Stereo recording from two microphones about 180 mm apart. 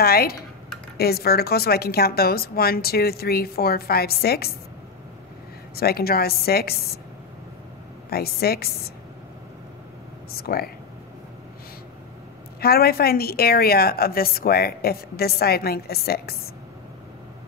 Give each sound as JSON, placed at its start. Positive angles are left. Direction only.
{"t": 0.0, "sound": "a woman's voice", "side_deg": 55}
{"t": 5.8, "sound": "a woman's voice", "side_deg": 60}
{"t": 8.1, "sound": "a woman's voice", "side_deg": 60}
{"t": 10.3, "sound": "a woman's voice", "side_deg": 60}
{"t": 12.5, "sound": "a woman's voice", "side_deg": 60}